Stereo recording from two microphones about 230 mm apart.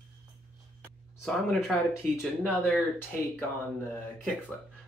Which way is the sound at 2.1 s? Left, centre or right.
Centre.